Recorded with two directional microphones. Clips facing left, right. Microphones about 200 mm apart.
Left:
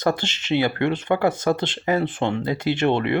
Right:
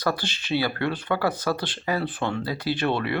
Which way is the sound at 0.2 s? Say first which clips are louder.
Left 4 dB; 25° left (ahead or behind).